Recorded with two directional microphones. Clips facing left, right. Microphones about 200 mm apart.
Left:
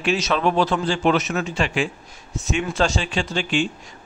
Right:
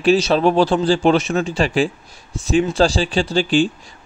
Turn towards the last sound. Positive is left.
turn(degrees=-35)  # may be behind; listen again after turning